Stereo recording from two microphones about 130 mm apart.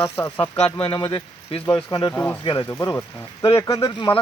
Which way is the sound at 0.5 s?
45° left (ahead or behind).